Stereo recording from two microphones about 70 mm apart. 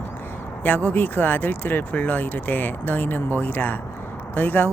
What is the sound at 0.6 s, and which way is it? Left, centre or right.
Speech, left.